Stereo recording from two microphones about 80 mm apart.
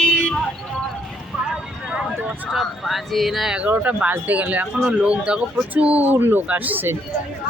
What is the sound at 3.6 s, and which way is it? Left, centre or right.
Speech, centre.